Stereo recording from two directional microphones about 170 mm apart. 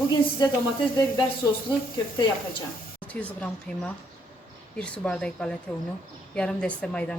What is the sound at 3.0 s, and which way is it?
A woman's voice, 10° left (ahead or behind).